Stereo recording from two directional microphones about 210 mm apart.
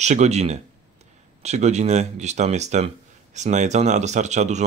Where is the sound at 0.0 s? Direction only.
35° right (ahead or behind).